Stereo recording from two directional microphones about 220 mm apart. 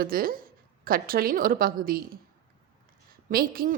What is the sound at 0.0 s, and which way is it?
A woman's voice, 40° right (ahead or behind).